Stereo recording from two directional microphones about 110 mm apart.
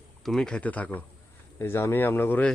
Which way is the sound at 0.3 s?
5° left (ahead or behind).